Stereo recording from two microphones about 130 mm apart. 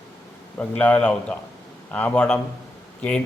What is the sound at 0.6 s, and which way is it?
A man's voice, 10° left (ahead or behind).